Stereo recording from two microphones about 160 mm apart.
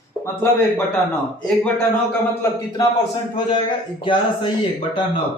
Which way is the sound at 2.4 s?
20° left (ahead or behind).